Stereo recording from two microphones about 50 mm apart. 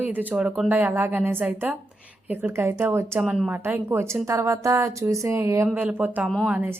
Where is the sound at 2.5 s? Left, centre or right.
Right.